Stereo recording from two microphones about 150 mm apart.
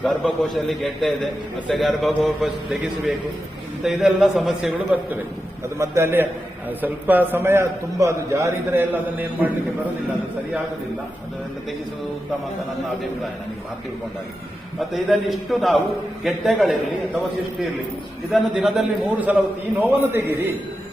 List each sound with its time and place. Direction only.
0.0 s a man's voice: centre (ahead or behind)
14.8 s a man's voice: centre (ahead or behind)
18.3 s a man's voice: 5° right (ahead or behind)